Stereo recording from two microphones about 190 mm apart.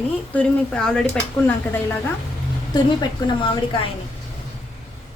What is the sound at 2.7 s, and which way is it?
Speech, 20° left (ahead or behind).